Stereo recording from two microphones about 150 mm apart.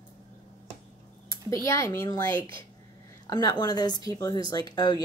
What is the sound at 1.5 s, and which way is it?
Speech, 20° left (ahead or behind).